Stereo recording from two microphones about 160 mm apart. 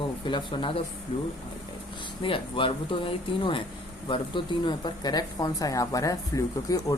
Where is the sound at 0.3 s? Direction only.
30° left (ahead or behind).